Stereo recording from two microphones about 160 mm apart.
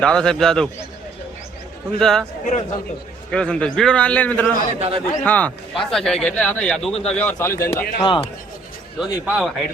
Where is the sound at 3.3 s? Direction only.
5° left (ahead or behind).